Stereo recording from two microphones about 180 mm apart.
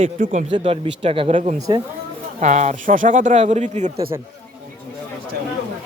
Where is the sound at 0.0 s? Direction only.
45° right (ahead or behind).